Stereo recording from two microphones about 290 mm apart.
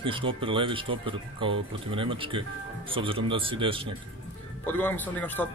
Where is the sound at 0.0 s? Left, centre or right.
Centre.